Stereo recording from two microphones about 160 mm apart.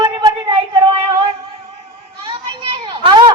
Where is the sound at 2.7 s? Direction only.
30° right (ahead or behind).